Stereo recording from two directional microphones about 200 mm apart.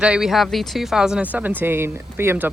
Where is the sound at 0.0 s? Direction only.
5° right (ahead or behind).